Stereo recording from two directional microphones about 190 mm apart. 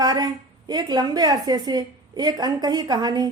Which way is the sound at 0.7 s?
20° right (ahead or behind).